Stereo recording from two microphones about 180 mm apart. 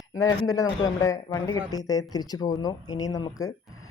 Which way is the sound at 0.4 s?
20° left (ahead or behind).